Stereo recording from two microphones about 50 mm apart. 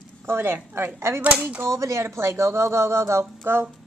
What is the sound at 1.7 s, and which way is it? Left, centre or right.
Speech, right.